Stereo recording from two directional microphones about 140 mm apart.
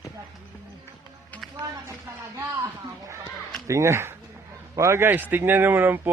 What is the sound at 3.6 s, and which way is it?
A man's voice, 20° right (ahead or behind).